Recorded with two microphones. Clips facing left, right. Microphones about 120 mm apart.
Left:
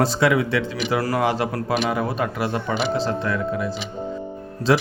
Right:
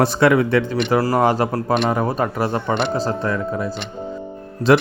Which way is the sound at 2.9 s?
40° right (ahead or behind).